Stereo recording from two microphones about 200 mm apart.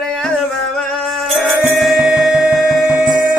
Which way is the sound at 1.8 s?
Centre (ahead or behind).